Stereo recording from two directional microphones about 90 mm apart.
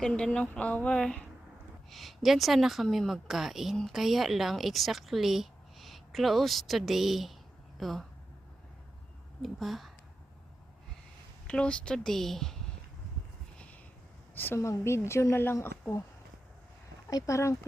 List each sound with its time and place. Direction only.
0.0 s a woman's voice: 10° left (ahead or behind)
9.4 s a woman's voice: centre (ahead or behind)
11.4 s speech: 10° left (ahead or behind)
14.3 s a woman's voice: 20° left (ahead or behind)
17.1 s speech: 40° left (ahead or behind)